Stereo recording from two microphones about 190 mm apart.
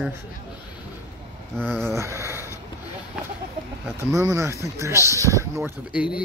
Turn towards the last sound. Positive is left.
turn(degrees=-10)  # may be behind; listen again after turning